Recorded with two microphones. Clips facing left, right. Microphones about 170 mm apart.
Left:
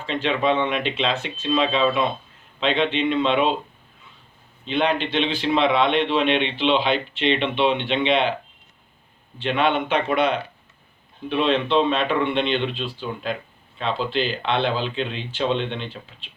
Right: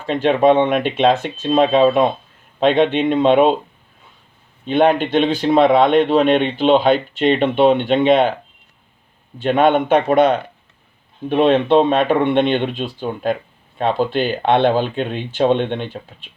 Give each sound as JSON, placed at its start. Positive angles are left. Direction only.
{"t": 0.0, "sound": "a man's voice", "side_deg": -50}
{"t": 4.6, "sound": "a man's voice", "side_deg": -50}
{"t": 9.4, "sound": "a man's voice", "side_deg": -45}